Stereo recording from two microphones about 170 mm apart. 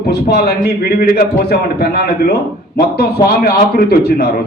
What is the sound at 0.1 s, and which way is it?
A man's voice, 75° left (ahead or behind).